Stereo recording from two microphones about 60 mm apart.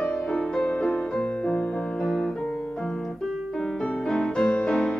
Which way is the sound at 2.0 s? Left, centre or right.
Centre.